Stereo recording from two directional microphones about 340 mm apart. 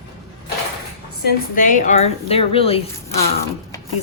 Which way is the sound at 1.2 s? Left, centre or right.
Left.